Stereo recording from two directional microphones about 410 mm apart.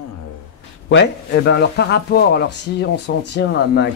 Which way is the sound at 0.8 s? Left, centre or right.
Left.